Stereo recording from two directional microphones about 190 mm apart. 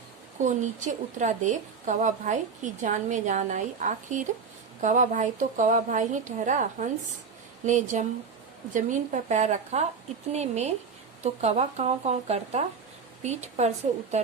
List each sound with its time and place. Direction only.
0.3 s a woman's voice: 40° right (ahead or behind)